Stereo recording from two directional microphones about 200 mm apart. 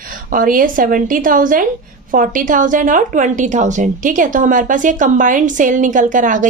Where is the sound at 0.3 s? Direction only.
45° right (ahead or behind).